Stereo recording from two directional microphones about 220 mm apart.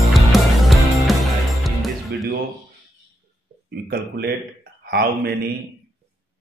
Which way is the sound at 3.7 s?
45° right (ahead or behind).